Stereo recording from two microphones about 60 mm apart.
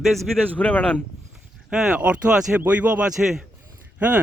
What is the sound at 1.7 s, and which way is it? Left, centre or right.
Speech, centre.